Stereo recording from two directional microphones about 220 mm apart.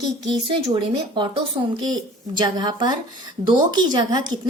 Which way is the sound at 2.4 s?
20° right (ahead or behind).